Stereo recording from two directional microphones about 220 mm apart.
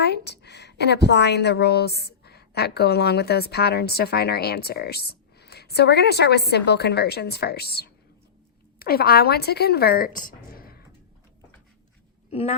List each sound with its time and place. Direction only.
0.0 s a woman's voice: 50° left (ahead or behind)
12.3 s speech: 30° left (ahead or behind)